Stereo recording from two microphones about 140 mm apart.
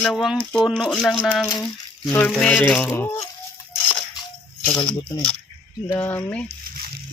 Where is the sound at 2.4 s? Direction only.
10° left (ahead or behind).